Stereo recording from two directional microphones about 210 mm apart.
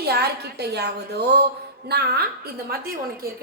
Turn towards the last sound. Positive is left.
turn(degrees=-45)  # may be behind; listen again after turning